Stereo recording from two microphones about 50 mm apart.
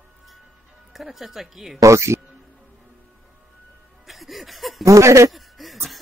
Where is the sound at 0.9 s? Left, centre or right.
Centre.